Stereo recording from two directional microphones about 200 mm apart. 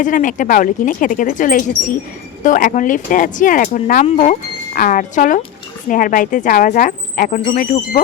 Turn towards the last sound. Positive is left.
turn(degrees=40)  # may be behind; listen again after turning